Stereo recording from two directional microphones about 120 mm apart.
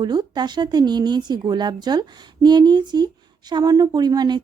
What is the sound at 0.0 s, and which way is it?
Speech, 35° right (ahead or behind).